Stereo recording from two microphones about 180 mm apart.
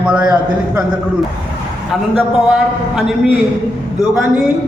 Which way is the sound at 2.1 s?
Centre (ahead or behind).